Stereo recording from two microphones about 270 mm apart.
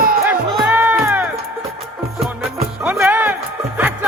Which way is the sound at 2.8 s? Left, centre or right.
Centre.